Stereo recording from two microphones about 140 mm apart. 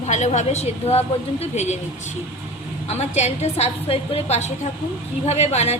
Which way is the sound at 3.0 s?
50° left (ahead or behind).